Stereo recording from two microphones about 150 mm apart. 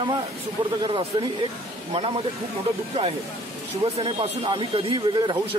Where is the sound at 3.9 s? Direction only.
40° right (ahead or behind).